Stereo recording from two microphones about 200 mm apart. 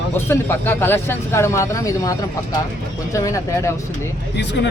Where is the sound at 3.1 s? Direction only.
15° left (ahead or behind).